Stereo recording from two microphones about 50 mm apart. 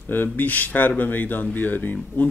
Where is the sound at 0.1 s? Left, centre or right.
Left.